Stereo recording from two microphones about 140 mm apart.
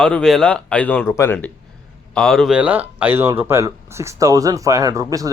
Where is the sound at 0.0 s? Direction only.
5° left (ahead or behind).